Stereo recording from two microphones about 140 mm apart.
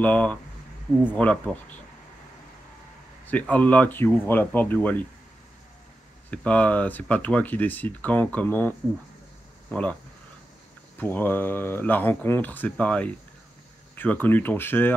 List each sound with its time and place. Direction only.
0.0 s speech: 10° left (ahead or behind)
3.3 s speech: 10° left (ahead or behind)
6.3 s speech: 10° left (ahead or behind)
11.0 s speech: 15° left (ahead or behind)